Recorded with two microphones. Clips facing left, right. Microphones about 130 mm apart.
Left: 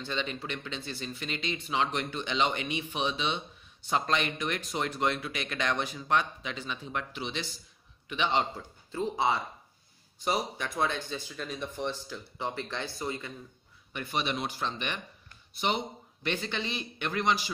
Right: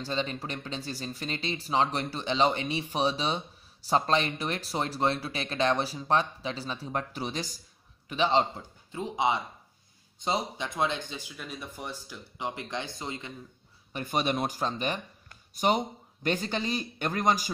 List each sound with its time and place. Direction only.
0.0 s speech: 35° right (ahead or behind)
8.9 s speech: 15° right (ahead or behind)
13.9 s speech: 45° right (ahead or behind)